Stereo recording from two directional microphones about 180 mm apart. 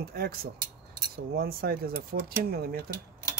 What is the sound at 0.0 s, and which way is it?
Speech, 60° right (ahead or behind).